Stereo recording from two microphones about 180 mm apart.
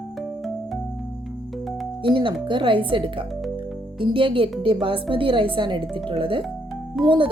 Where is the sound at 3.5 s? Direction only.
30° right (ahead or behind).